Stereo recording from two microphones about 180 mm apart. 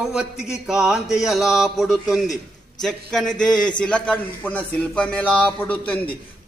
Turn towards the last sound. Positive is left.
turn(degrees=10)  # may be behind; listen again after turning